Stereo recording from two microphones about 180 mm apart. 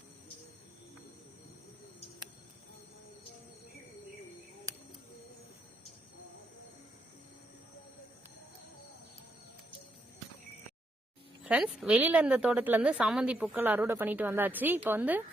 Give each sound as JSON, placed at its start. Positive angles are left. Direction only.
{"t": 4.7, "sound": "bird", "side_deg": -20}
{"t": 11.4, "sound": "a woman's voice", "side_deg": -5}